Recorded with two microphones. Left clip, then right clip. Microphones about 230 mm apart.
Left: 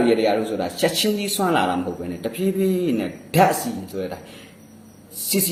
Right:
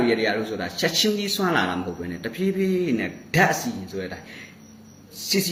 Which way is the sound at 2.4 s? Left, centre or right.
Right.